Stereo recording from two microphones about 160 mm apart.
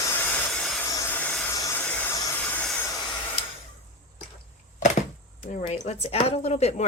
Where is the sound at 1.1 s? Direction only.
5° left (ahead or behind).